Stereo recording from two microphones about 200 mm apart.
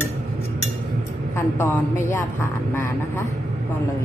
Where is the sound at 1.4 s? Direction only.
10° left (ahead or behind).